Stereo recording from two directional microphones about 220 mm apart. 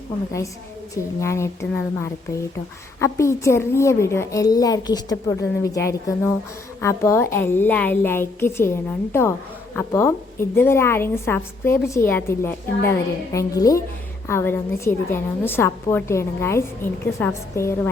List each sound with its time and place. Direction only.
1.2 s a woman's voice: 10° left (ahead or behind)
6.8 s a woman's voice: 10° left (ahead or behind)